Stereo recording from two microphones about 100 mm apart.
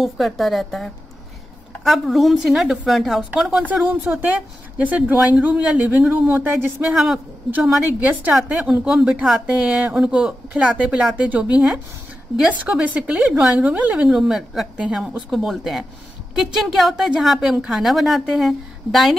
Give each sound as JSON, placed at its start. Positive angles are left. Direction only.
{"t": 0.0, "sound": "a woman's voice", "side_deg": 0}
{"t": 3.8, "sound": "a woman's voice", "side_deg": -15}